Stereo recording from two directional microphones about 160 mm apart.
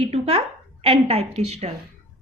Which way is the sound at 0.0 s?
40° right (ahead or behind).